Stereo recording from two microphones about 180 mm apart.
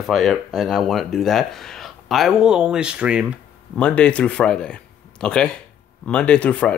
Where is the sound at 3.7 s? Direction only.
5° left (ahead or behind).